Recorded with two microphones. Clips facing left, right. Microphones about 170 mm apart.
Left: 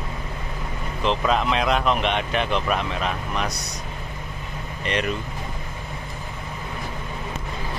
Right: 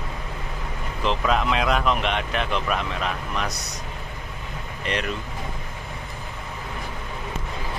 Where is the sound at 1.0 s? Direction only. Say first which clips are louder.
Left 1 dB; centre (ahead or behind).